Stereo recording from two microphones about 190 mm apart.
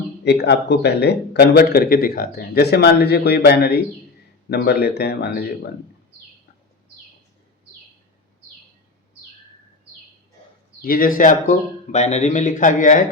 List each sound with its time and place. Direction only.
0.3 s speech: 60° left (ahead or behind)
10.8 s speech: 50° left (ahead or behind)